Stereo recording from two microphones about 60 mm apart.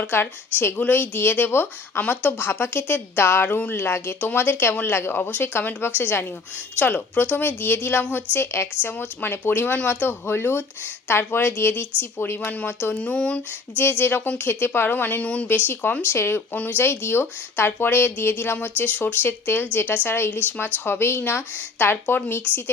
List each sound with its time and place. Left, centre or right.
0.1 s speech: left
13.0 s speech: centre
14.0 s speech: left
15.4 s speech: left
16.0 s speech: left
16.5 s speech: left
16.8 s speech: left